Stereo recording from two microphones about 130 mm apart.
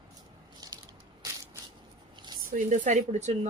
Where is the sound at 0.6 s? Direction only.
30° right (ahead or behind).